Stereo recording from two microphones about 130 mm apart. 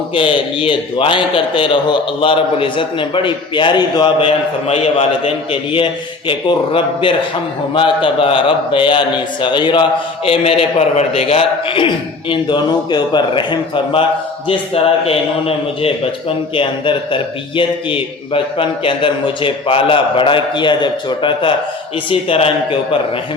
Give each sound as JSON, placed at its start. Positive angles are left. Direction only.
{"t": 0.1, "sound": "a man's voice", "side_deg": 40}
{"t": 4.7, "sound": "a man's voice", "side_deg": 50}